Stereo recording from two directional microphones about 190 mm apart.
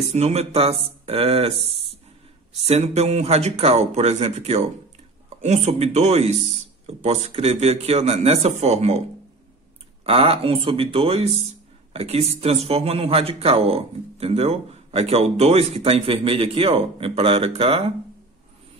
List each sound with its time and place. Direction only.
0.1 s speech: 35° right (ahead or behind)
10.0 s speech: 30° right (ahead or behind)